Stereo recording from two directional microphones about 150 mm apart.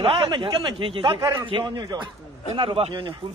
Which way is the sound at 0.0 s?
35° right (ahead or behind).